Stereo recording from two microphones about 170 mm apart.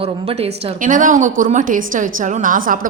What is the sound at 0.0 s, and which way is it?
A woman's voice, 35° right (ahead or behind).